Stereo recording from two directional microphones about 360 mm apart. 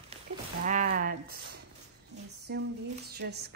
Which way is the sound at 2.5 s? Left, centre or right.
Right.